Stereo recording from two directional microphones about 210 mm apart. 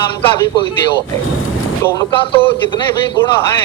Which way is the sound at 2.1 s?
25° left (ahead or behind).